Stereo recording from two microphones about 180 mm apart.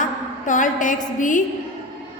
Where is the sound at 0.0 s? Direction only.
45° left (ahead or behind).